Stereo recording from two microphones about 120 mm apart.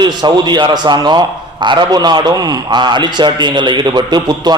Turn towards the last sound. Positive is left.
turn(degrees=-35)  # may be behind; listen again after turning